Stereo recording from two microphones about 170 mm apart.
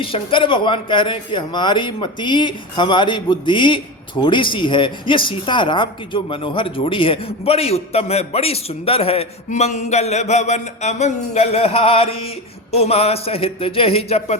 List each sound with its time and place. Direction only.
0.0 s a woman's voice: 30° left (ahead or behind)